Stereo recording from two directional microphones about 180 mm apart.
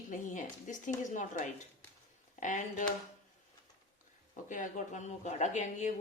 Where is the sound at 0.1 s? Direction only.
45° left (ahead or behind).